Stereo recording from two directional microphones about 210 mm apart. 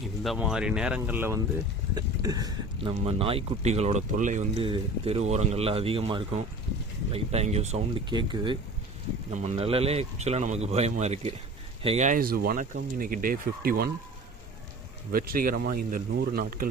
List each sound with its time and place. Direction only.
0.2 s speech: centre (ahead or behind); by 2.9 s 15° right (ahead or behind)
3.0 s speech: 25° right (ahead or behind); by 13.9 s 45° right (ahead or behind)
15.1 s speech: 45° right (ahead or behind)